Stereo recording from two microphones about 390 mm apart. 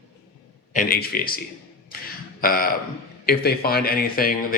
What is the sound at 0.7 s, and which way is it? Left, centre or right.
Speech, left.